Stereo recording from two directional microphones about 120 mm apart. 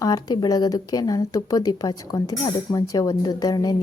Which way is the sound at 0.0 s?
30° left (ahead or behind).